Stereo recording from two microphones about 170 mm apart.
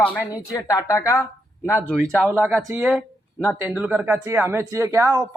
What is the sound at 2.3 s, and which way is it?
Speech, 10° right (ahead or behind).